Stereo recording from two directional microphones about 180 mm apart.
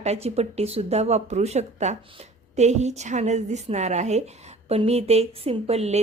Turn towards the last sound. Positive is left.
turn(degrees=-35)  # may be behind; listen again after turning